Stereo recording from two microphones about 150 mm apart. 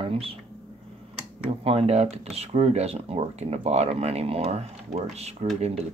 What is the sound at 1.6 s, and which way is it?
Speech, 40° right (ahead or behind).